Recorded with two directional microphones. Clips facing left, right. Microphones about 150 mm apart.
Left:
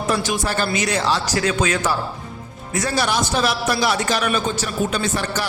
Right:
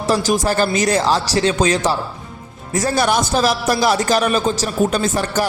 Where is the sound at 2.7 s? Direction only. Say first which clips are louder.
Right 4 dB; 45° right (ahead or behind).